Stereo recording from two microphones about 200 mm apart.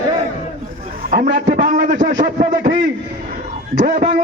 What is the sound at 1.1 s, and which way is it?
A man's voice, 40° right (ahead or behind).